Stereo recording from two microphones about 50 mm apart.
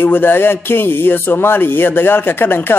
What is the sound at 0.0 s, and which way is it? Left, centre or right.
Speech, left.